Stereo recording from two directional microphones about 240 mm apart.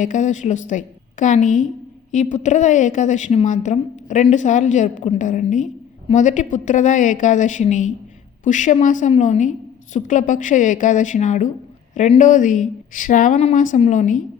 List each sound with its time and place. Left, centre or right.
0.0 s a woman's voice: left